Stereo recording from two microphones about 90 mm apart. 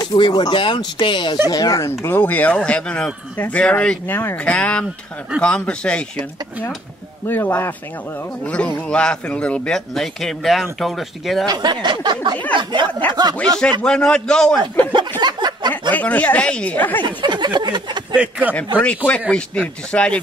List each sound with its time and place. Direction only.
0.0 s speech: 55° left (ahead or behind)
1.5 s speech: 40° left (ahead or behind); by 4.0 s 10° left (ahead or behind)
4.1 s speech: 25° left (ahead or behind)
4.5 s speech: 15° left (ahead or behind)
7.2 s speech: 20° left (ahead or behind); by 11.4 s centre (ahead or behind)
11.4 s a sound: 50° right (ahead or behind)
13.1 s speech: 45° right (ahead or behind)
13.6 s speech: 10° left (ahead or behind)
14.9 s a sound: 60° right (ahead or behind)
15.9 s speech: 15° left (ahead or behind)
17.0 s a sound: 55° right (ahead or behind)
18.1 s a man's voice: 15° right (ahead or behind)
18.5 s speech: 15° left (ahead or behind)